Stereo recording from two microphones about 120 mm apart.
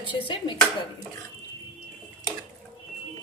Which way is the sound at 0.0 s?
45° left (ahead or behind).